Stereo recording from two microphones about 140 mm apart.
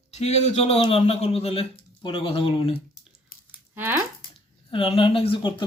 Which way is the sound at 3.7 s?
15° right (ahead or behind).